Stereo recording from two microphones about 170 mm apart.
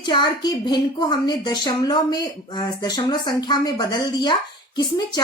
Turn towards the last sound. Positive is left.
turn(degrees=25)  # may be behind; listen again after turning